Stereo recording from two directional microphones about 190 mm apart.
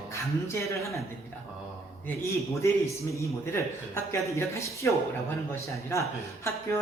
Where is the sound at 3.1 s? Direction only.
15° left (ahead or behind).